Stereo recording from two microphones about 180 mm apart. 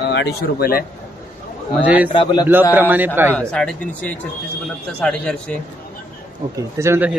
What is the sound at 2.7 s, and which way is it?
Speech, 10° right (ahead or behind).